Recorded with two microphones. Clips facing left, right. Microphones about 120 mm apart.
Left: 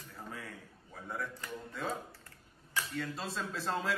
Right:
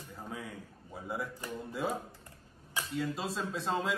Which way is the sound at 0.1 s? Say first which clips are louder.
Right 3 dB; centre (ahead or behind).